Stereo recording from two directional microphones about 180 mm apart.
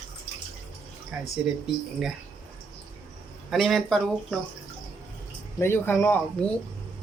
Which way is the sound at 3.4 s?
Centre (ahead or behind).